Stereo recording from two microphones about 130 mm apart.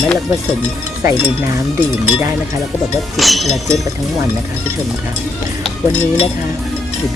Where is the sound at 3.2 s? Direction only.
Centre (ahead or behind).